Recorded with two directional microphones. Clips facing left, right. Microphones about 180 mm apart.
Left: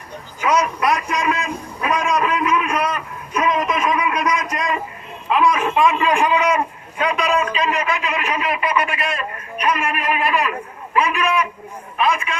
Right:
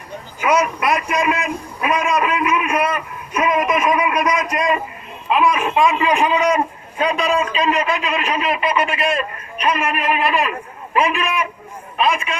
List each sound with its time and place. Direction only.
0.3 s a man's voice: 10° right (ahead or behind)